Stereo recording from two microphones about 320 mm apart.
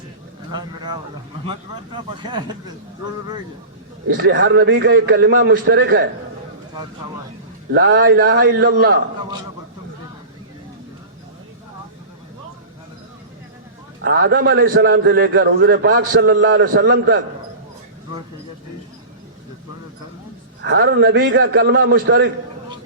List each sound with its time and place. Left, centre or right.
0.5 s speech: centre
4.1 s a man's voice: right
7.7 s a man's voice: right
14.0 s a man's voice: right
20.7 s a man's voice: right